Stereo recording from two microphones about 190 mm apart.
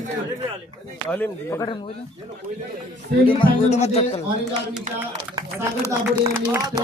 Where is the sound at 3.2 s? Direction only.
30° left (ahead or behind).